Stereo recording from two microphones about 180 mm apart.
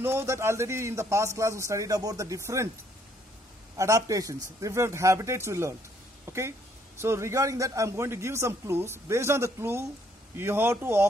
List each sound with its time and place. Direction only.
0.0 s a man's voice: 15° right (ahead or behind)
3.7 s a man's voice: 15° right (ahead or behind)